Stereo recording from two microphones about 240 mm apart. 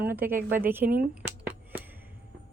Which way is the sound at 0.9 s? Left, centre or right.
Centre.